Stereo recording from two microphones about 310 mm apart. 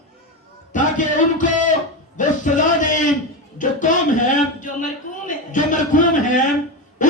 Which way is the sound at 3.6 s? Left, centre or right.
Left.